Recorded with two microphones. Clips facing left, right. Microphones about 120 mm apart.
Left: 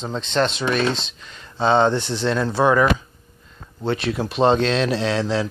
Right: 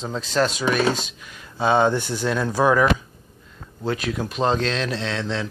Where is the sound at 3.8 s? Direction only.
Centre (ahead or behind).